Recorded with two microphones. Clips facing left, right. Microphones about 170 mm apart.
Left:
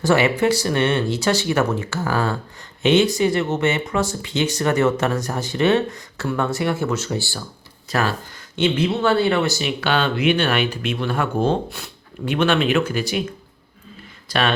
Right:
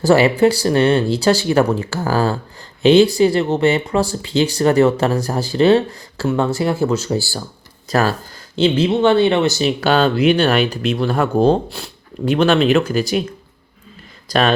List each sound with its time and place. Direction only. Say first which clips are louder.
0.0 s speech: right 5 dB; 35° right (ahead or behind)
9.6 s speech: right 6 dB; 35° right (ahead or behind)
14.3 s speech: right 5 dB; 40° right (ahead or behind)